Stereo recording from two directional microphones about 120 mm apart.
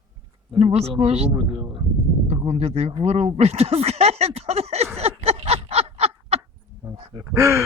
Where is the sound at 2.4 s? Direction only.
60° right (ahead or behind).